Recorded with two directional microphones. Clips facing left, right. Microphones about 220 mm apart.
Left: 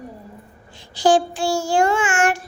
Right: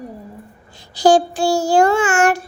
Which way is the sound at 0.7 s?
40° right (ahead or behind).